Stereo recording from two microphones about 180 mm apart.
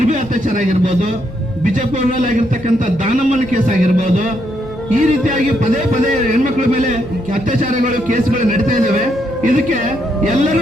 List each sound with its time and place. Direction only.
0.0 s a man's voice: 45° right (ahead or behind)